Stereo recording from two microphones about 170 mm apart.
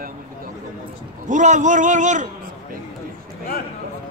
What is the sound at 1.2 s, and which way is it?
A man's voice, 45° right (ahead or behind).